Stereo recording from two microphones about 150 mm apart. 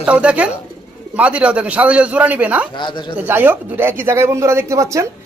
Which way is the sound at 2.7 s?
30° left (ahead or behind).